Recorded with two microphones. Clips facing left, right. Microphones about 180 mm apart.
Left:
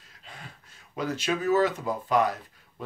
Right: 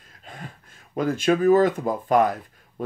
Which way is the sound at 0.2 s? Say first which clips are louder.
Right 7 dB; 50° right (ahead or behind).